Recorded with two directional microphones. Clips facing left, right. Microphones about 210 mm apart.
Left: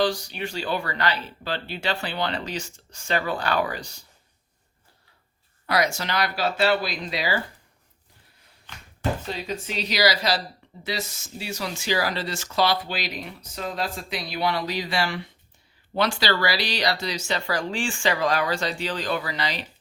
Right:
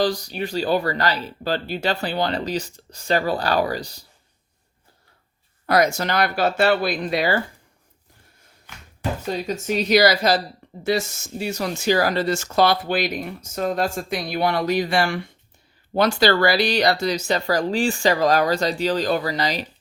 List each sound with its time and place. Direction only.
0.0 s speech: 40° right (ahead or behind)
5.6 s speech: 50° right (ahead or behind)
8.7 s basketball bounce: 10° right (ahead or behind)
9.2 s speech: 45° right (ahead or behind)